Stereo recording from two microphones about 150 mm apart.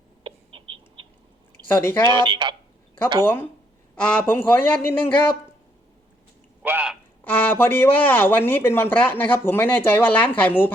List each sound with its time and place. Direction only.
0.3 s bird: 35° right (ahead or behind)
1.6 s speech: 15° left (ahead or behind)
2.0 s speech: 30° right (ahead or behind)
3.2 s speech: 15° left (ahead or behind)
6.6 s a sound: 10° right (ahead or behind)
7.3 s speech: 10° left (ahead or behind)